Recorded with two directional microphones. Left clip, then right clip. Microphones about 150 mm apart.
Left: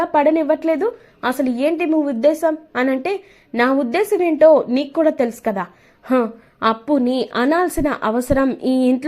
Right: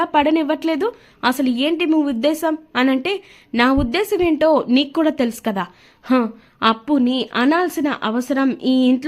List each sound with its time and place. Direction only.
0.0 s a woman's voice: 20° right (ahead or behind)
6.1 s speech: 35° right (ahead or behind)
6.6 s a woman's voice: 20° right (ahead or behind)